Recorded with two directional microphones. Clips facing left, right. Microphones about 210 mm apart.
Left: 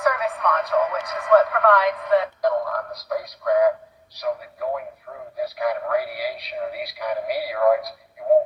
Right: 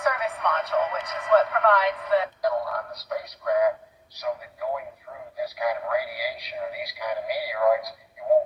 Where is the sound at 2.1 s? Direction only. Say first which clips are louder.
Left 4 dB; 40° left (ahead or behind).